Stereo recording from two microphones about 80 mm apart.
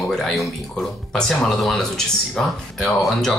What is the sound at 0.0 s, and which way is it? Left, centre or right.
Speech, centre.